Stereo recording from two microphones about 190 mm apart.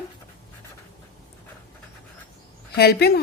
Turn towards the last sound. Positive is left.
turn(degrees=55)  # may be behind; listen again after turning